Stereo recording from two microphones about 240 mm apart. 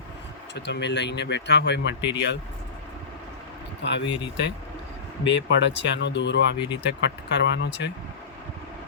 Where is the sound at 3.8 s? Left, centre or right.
Left.